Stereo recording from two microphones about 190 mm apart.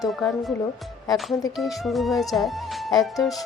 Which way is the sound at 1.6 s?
Centre (ahead or behind).